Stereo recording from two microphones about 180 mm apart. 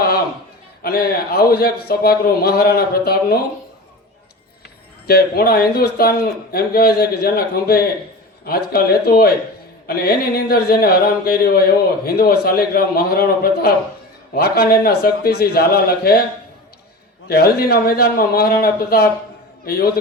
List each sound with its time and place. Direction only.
0.8 s a man's voice: 60° left (ahead or behind)
5.0 s a man's voice: 60° left (ahead or behind)
17.2 s a man's voice: 60° left (ahead or behind)